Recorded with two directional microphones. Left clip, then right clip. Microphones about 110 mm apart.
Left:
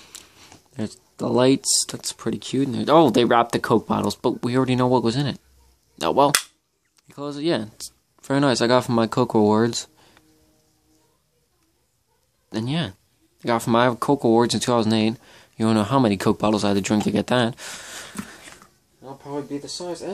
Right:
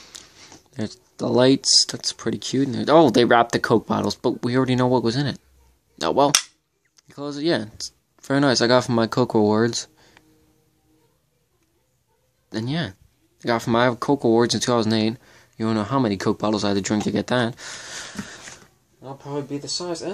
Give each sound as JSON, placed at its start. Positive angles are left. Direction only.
{"t": 0.0, "sound": "speech", "side_deg": 0}
{"t": 12.4, "sound": "speech", "side_deg": 10}
{"t": 17.8, "sound": "a sound", "side_deg": -5}
{"t": 18.9, "sound": "speech", "side_deg": -15}